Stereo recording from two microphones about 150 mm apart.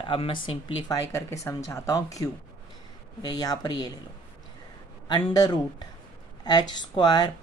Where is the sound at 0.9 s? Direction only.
20° left (ahead or behind).